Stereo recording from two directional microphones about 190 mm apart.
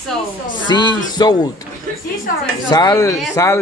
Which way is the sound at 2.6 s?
20° left (ahead or behind).